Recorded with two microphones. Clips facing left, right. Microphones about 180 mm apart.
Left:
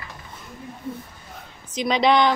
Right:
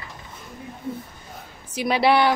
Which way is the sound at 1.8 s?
10° right (ahead or behind).